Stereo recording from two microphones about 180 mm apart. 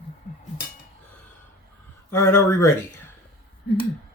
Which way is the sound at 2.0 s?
15° left (ahead or behind).